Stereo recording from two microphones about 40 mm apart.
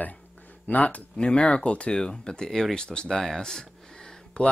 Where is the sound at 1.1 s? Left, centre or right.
Left.